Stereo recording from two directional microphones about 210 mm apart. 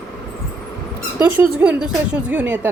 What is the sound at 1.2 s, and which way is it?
Speech, 10° right (ahead or behind).